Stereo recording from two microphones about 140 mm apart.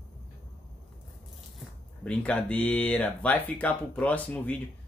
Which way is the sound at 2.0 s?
10° left (ahead or behind).